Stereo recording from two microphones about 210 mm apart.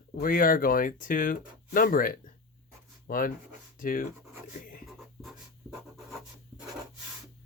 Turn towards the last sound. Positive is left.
turn(degrees=0)  # may be behind; listen again after turning